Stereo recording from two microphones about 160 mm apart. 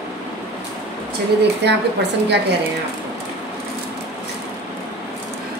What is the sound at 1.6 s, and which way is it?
Speech, 90° right.